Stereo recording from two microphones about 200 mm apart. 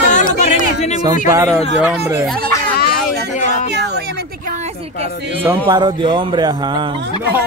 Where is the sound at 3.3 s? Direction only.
40° left (ahead or behind).